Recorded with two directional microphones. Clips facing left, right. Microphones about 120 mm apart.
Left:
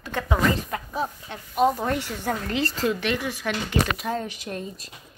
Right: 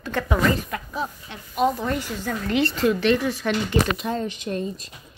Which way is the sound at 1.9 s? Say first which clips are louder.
Even; 60° left (ahead or behind).